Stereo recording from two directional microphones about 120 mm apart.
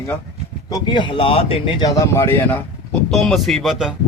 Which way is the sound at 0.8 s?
40° left (ahead or behind).